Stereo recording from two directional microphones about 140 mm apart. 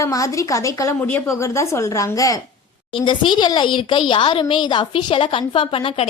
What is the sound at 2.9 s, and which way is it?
A woman's voice, 35° left (ahead or behind).